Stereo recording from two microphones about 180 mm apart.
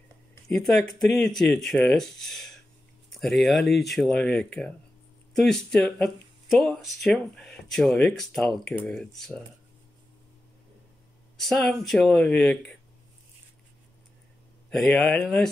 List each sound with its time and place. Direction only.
0.5 s speech: 5° left (ahead or behind)
11.3 s speech: centre (ahead or behind)
14.7 s speech: 5° left (ahead or behind)